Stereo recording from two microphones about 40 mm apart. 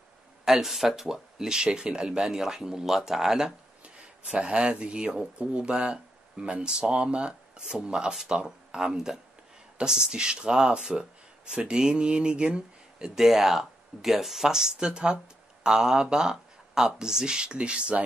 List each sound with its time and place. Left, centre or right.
0.5 s speech: centre
1.1 s speech: centre
3.8 s speech: right
13.2 s speech: centre; by 17.9 s right